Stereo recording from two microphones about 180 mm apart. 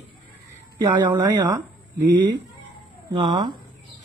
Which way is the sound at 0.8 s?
25° right (ahead or behind).